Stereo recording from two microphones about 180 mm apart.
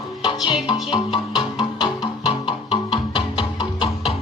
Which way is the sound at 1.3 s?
25° left (ahead or behind).